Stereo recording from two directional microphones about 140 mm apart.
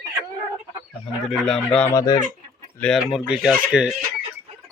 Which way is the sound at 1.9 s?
20° left (ahead or behind).